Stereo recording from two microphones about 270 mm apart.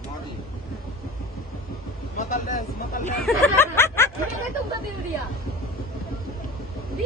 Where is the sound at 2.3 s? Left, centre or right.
Left.